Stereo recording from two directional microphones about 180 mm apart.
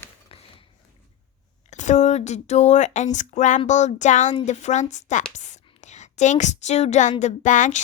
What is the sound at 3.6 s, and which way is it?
A woman's voice, 40° left (ahead or behind).